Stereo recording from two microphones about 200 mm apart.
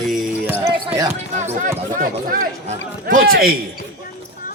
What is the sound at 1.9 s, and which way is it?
Speech, 45° right (ahead or behind).